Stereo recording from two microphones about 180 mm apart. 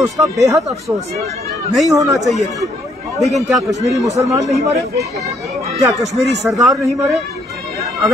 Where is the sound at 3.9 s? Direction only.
20° right (ahead or behind).